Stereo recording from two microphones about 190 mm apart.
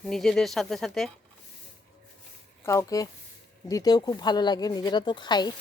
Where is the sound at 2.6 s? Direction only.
15° left (ahead or behind).